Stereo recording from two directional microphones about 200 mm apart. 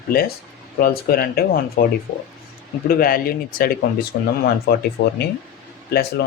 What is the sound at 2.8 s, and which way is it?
Speech, 45° left (ahead or behind).